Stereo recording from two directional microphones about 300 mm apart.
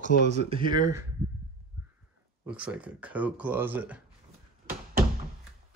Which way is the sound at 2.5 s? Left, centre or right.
Centre.